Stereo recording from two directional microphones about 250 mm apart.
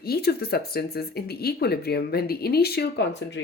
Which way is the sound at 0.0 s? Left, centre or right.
Left.